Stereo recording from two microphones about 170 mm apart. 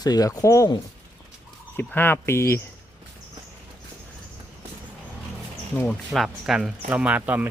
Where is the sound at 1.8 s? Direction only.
10° left (ahead or behind).